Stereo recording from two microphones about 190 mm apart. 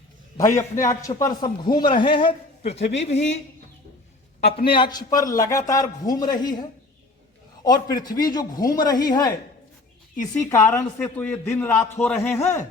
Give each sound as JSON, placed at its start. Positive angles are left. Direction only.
{"t": 0.3, "sound": "a man's voice", "side_deg": 15}
{"t": 4.4, "sound": "a man's voice", "side_deg": 30}
{"t": 10.5, "sound": "a man's voice", "side_deg": 15}